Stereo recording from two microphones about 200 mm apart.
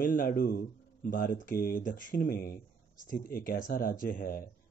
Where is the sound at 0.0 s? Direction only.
45° left (ahead or behind).